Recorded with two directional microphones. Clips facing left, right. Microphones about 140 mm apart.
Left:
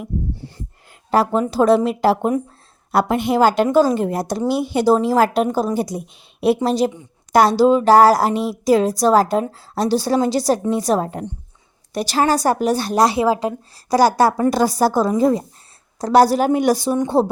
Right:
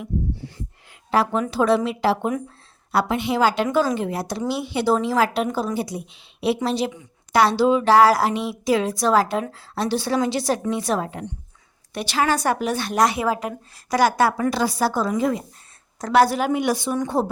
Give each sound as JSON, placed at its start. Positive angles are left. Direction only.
{"t": 1.1, "sound": "a woman's voice", "side_deg": 40}